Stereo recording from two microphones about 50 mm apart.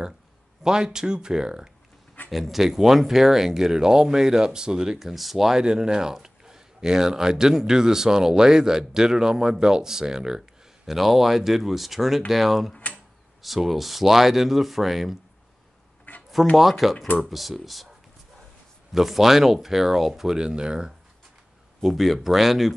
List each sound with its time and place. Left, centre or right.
0.7 s speech: centre
2.3 s speech: centre
10.9 s speech: centre
16.1 s a sound: left
16.5 s speech: centre
18.9 s speech: centre
21.9 s speech: centre